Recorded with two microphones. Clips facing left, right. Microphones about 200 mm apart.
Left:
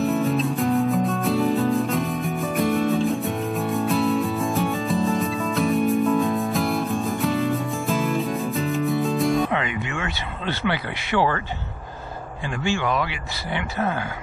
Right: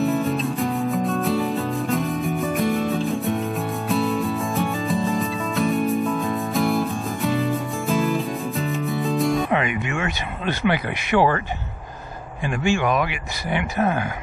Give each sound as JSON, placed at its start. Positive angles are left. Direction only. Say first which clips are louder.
{"t": 0.0, "sound": "music", "louder": "even", "side_deg": 0}
{"t": 9.5, "sound": "a sound", "louder": "right 3 dB", "side_deg": -20}
{"t": 12.4, "sound": "speech", "louder": "right 3 dB", "side_deg": -20}